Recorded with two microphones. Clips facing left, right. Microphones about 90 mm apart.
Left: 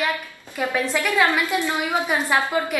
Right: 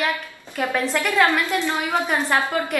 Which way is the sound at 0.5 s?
5° left (ahead or behind).